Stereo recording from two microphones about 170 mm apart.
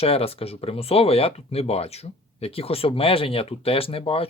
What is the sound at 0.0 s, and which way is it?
Speech, 35° left (ahead or behind).